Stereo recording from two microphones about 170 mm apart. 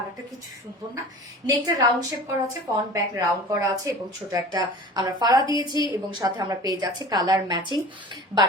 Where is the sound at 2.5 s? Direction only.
20° right (ahead or behind).